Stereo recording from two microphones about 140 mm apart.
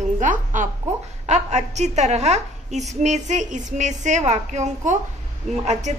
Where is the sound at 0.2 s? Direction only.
65° right (ahead or behind).